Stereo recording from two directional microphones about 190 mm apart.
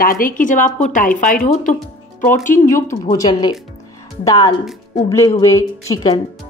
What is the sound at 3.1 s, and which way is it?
Speech, 20° left (ahead or behind).